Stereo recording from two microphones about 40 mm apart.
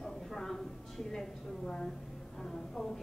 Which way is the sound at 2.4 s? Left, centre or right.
Centre.